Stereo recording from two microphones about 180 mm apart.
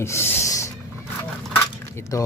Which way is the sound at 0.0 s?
15° left (ahead or behind).